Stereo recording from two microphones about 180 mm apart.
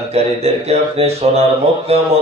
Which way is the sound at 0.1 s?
35° right (ahead or behind).